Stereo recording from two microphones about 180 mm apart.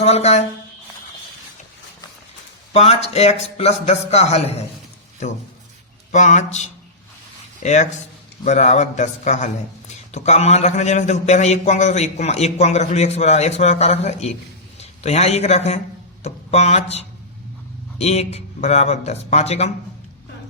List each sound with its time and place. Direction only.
0.0 s speech: 35° left (ahead or behind)
2.7 s a man's voice: 35° left (ahead or behind)
6.1 s a man's voice: 40° left (ahead or behind)